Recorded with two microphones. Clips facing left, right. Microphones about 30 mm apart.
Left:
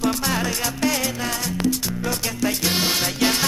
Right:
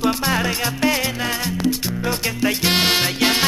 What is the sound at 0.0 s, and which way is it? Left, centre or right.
Music, right.